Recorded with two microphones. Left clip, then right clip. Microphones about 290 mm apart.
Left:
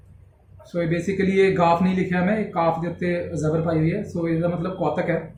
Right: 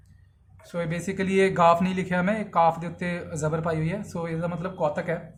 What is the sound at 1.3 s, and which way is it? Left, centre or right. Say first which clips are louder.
Speech: left 1 dB; right.